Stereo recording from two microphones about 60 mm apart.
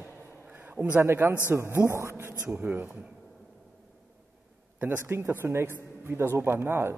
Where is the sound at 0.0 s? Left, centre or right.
Right.